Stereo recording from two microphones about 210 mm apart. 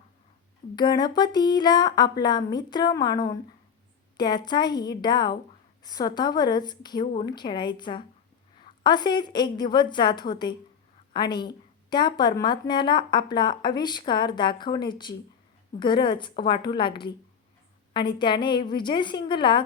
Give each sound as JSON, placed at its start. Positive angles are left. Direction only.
{"t": 0.8, "sound": "a woman's voice", "side_deg": 20}